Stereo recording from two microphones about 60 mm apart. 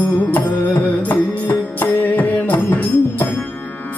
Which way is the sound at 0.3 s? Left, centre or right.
Left.